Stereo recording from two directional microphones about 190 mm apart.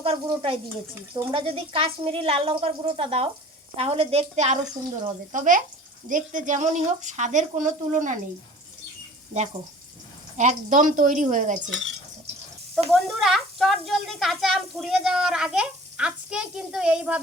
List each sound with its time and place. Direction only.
0.0 s a woman's voice: 30° right (ahead or behind)
10.3 s speech: 40° right (ahead or behind)
12.9 s speech: centre (ahead or behind)